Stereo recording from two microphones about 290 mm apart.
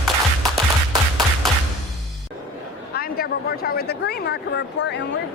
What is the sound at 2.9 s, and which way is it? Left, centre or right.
Speech, left.